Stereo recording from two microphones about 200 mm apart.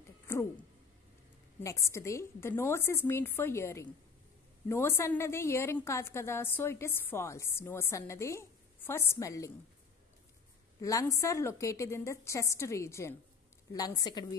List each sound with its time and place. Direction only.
1.6 s a woman's voice: 15° left (ahead or behind)
10.8 s a woman's voice: 15° left (ahead or behind)